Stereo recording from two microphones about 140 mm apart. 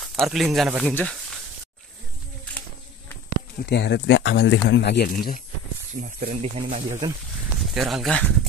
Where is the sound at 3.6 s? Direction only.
75° left (ahead or behind).